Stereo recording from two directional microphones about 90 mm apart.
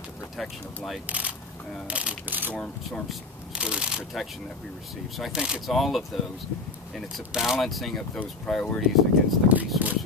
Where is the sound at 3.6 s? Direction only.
10° right (ahead or behind).